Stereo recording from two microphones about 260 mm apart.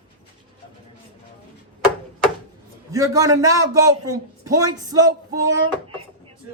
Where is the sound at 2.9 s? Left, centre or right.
Centre.